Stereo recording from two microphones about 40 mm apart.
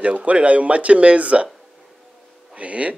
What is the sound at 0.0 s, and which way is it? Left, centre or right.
Speech, right.